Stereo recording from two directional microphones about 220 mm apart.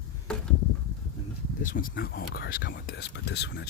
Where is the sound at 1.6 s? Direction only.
40° left (ahead or behind).